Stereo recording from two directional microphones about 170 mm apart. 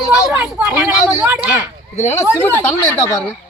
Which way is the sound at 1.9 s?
40° left (ahead or behind).